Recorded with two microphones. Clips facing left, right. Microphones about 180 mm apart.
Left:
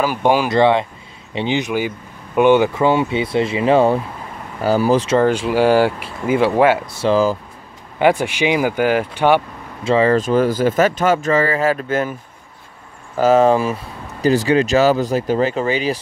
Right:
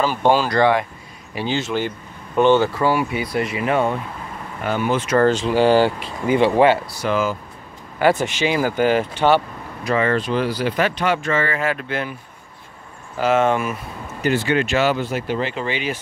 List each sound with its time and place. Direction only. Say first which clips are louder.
0.0 s speech: left 1 dB; 10° left (ahead or behind); by 5.2 s 30° left (ahead or behind)
5.2 s speech: left 1 dB; 10° left (ahead or behind)
6.9 s speech: left 5 dB; 30° left (ahead or behind)
8.0 s speech: left 2 dB; 10° left (ahead or behind)
9.8 s speech: left 5 dB; 30° left (ahead or behind)
13.2 s speech: left 5 dB; 35° left (ahead or behind)